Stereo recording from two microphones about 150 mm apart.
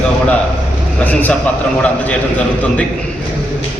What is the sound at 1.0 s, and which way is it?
Speech, 10° left (ahead or behind).